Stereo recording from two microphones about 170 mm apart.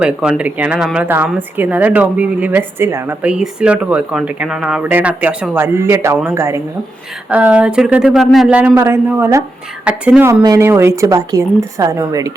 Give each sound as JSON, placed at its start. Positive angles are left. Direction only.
{"t": 0.0, "sound": "a woman's voice", "side_deg": -5}